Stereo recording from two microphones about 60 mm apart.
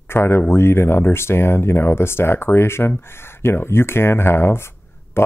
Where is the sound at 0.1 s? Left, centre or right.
Left.